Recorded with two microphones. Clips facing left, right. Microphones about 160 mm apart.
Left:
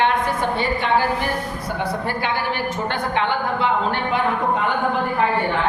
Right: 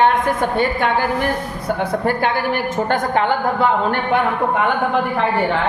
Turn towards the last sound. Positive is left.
turn(degrees=-50)  # may be behind; listen again after turning